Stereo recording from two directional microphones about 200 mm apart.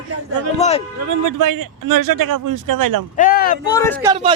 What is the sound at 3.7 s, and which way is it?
Speech, 15° left (ahead or behind).